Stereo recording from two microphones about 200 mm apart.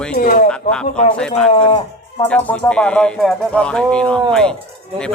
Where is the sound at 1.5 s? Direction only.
25° left (ahead or behind).